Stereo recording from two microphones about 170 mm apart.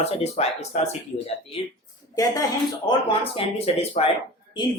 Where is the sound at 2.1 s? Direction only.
20° left (ahead or behind).